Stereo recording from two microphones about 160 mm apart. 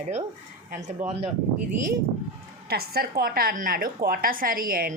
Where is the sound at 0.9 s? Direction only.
40° right (ahead or behind).